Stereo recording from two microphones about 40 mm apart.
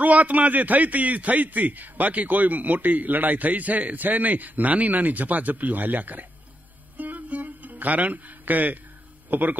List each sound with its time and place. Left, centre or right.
0.0 s a man's voice: right
7.0 s music: right
9.3 s a man's voice: right